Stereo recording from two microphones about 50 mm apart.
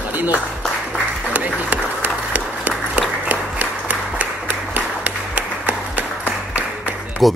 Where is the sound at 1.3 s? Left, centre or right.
Right.